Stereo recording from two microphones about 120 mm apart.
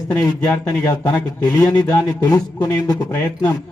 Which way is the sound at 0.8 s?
25° left (ahead or behind).